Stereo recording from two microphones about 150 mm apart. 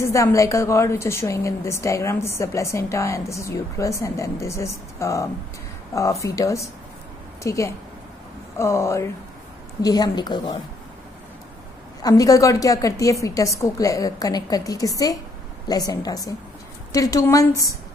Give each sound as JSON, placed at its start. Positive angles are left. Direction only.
{"t": 0.0, "sound": "a woman's voice", "side_deg": 20}
{"t": 12.0, "sound": "a woman's voice", "side_deg": 25}